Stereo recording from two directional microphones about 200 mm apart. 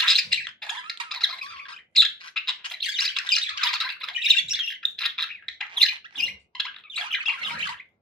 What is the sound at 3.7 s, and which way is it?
Bird, centre (ahead or behind).